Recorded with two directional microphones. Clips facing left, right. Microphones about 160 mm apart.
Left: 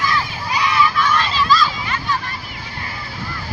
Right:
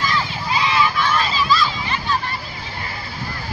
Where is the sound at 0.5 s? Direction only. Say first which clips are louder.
Left 1 dB; 25° right (ahead or behind).